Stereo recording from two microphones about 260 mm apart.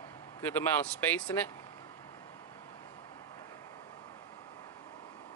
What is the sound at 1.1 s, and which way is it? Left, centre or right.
Speech, centre.